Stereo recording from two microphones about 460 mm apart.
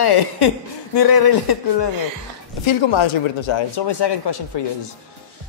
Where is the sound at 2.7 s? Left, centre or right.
Left.